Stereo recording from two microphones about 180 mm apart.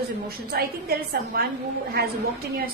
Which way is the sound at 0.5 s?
60° right (ahead or behind).